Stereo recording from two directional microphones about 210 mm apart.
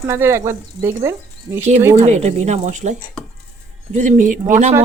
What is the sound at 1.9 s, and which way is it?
Speech, 35° right (ahead or behind).